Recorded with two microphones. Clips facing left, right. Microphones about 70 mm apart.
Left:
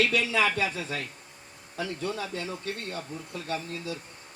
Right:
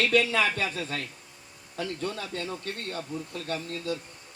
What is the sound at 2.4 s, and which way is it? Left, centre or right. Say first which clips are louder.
Speech: even; right.